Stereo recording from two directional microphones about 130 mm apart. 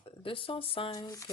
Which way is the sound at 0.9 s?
25° left (ahead or behind).